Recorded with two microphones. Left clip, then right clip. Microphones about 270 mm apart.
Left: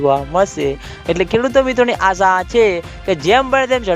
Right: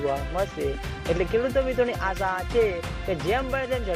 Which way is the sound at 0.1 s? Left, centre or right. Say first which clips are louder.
Left 13 dB; left.